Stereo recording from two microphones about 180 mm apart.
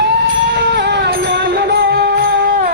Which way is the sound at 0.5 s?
75° right (ahead or behind).